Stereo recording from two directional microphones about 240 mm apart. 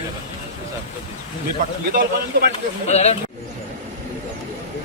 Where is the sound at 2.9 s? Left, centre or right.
Left.